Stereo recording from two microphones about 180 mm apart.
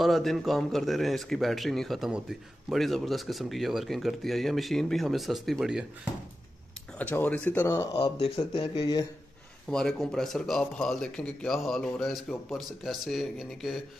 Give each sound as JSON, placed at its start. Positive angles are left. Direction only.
{"t": 0.0, "sound": "a man's voice", "side_deg": 0}
{"t": 7.0, "sound": "speech", "side_deg": 10}
{"t": 9.7, "sound": "a man's voice", "side_deg": 5}